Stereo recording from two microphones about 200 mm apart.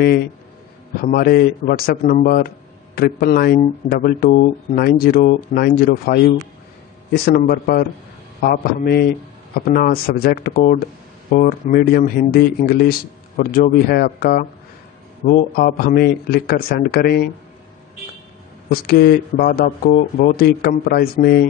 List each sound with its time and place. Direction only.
0.9 s speech: 50° left (ahead or behind)
18.7 s speech: 50° left (ahead or behind)